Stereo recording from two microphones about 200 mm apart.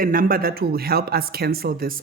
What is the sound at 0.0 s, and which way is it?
Speech, 45° right (ahead or behind).